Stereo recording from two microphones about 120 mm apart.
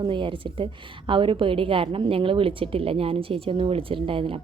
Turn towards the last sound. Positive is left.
turn(degrees=-50)  # may be behind; listen again after turning